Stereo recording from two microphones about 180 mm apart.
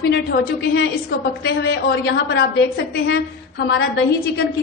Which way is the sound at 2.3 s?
70° left (ahead or behind).